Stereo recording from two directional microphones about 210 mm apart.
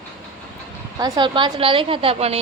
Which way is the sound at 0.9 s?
20° right (ahead or behind).